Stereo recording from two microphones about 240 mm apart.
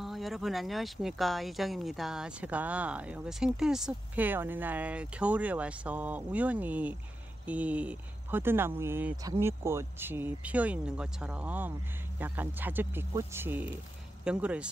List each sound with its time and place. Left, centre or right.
0.0 s speech: centre